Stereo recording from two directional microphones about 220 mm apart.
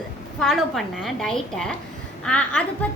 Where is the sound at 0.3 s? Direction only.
Centre (ahead or behind).